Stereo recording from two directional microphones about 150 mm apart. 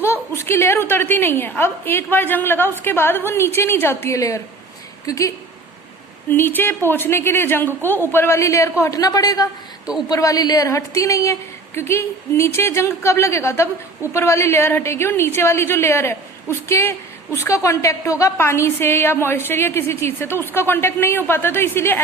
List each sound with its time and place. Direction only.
0.0 s a woman's voice: 15° left (ahead or behind)
6.3 s a woman's voice: 15° left (ahead or behind)